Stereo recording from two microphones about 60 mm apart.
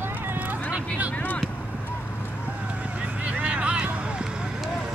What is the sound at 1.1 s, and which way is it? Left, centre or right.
Vehicle, left.